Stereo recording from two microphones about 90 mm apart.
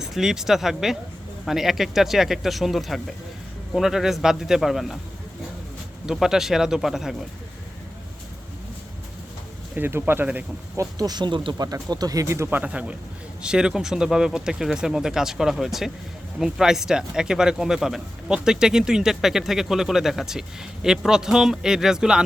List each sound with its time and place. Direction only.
0.0 s speech: 5° right (ahead or behind)
6.1 s speech: 5° right (ahead or behind)
9.7 s speech: 25° right (ahead or behind)
10.8 s speech: 45° right (ahead or behind); by 11.5 s 60° right (ahead or behind)
11.5 s a man's voice: 45° right (ahead or behind); by 22.2 s 10° right (ahead or behind)